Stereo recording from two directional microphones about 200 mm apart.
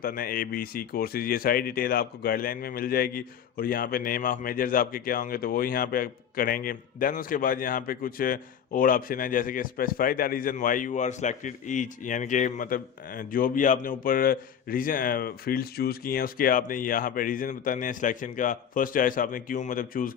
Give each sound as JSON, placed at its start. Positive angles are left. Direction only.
{"t": 0.0, "sound": "speech", "side_deg": 45}